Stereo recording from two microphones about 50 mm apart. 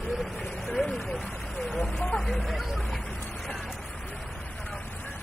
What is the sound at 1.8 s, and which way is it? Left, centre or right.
Speech, centre.